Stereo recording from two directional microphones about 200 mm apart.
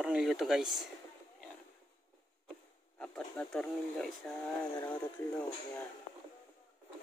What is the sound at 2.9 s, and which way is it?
Speech, 5° left (ahead or behind).